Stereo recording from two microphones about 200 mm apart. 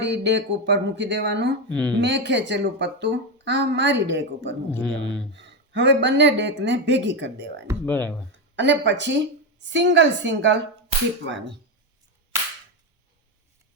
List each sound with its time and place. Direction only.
0.0 s a woman's voice: 60° right (ahead or behind)
1.7 s speech: 5° left (ahead or behind)
2.0 s a woman's voice: 60° right (ahead or behind)
4.7 s speech: 5° left (ahead or behind)
5.3 s a woman's voice: 65° right (ahead or behind)
7.9 s speech: 10° left (ahead or behind)
8.3 s a woman's voice: 65° right (ahead or behind)